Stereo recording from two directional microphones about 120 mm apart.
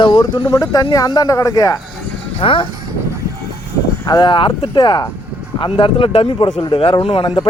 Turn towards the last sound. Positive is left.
turn(degrees=45)  # may be behind; listen again after turning